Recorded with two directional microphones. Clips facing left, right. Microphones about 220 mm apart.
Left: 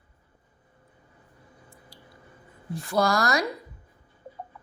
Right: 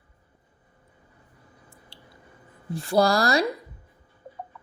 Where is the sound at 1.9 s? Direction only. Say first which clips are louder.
Right 1 dB; 25° right (ahead or behind).